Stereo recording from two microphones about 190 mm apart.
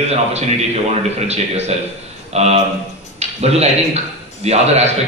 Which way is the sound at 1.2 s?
35° right (ahead or behind).